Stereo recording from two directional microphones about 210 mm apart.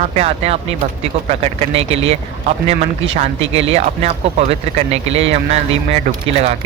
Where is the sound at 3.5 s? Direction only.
30° right (ahead or behind).